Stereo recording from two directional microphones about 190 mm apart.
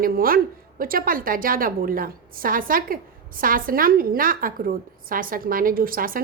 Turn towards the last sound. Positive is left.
turn(degrees=-50)  # may be behind; listen again after turning